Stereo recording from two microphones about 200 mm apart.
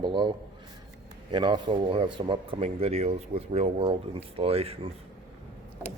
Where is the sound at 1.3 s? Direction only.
25° right (ahead or behind).